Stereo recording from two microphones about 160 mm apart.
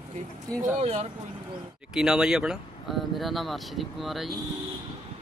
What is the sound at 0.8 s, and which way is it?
Speech, 40° right (ahead or behind).